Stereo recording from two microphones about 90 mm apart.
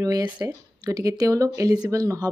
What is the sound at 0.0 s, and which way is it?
Speech, 40° right (ahead or behind).